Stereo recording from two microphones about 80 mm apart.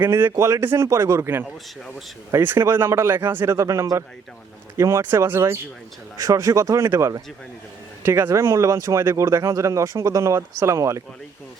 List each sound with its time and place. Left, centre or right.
0.0 s speech: right
0.3 s speech: right
0.6 s speech: right
0.9 s speech: right
6.1 s speech: right